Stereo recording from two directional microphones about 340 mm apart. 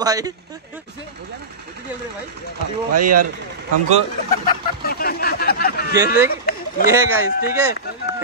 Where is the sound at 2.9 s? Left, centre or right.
Right.